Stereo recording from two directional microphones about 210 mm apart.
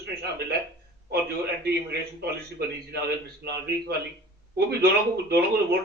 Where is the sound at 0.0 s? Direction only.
50° right (ahead or behind).